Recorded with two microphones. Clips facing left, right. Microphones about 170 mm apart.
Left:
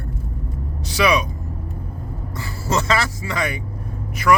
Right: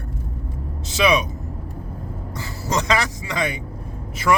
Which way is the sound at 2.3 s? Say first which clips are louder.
Left 2 dB; 15° right (ahead or behind).